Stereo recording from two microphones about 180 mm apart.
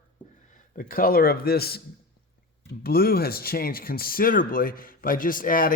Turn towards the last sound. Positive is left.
turn(degrees=50)  # may be behind; listen again after turning